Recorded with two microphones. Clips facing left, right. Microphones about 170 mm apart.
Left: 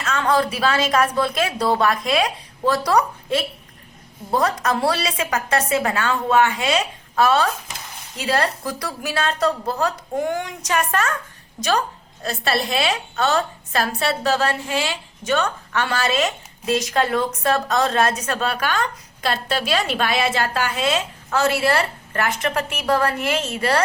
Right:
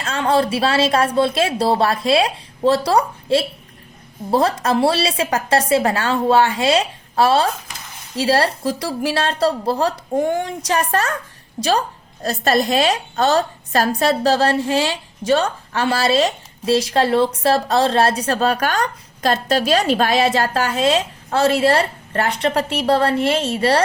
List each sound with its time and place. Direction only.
0.0 s a woman's voice: 30° right (ahead or behind)
12.2 s a woman's voice: 40° right (ahead or behind)